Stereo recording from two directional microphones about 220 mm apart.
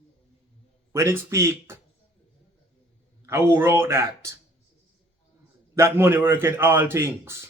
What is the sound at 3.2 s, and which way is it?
A man's voice, 10° right (ahead or behind).